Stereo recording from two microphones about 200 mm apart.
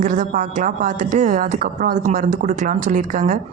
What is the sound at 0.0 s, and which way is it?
Speech, 40° right (ahead or behind).